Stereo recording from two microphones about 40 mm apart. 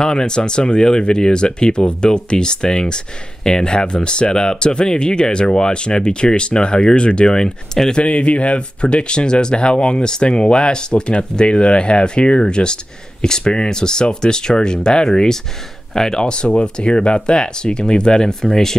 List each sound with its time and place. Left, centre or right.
0.0 s speech: centre
8.0 s speech: left; by 16.2 s centre
16.2 s speech: left